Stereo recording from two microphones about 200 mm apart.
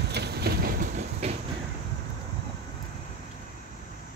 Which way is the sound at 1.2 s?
30° right (ahead or behind).